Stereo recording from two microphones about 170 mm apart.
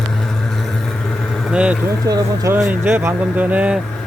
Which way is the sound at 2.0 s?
20° right (ahead or behind).